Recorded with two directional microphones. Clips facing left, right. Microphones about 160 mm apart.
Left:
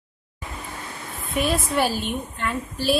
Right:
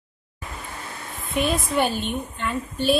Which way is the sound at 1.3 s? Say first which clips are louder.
Even; centre (ahead or behind).